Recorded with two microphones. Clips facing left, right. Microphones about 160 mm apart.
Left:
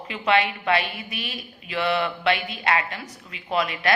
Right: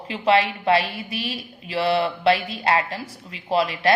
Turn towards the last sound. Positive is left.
turn(degrees=-30)  # may be behind; listen again after turning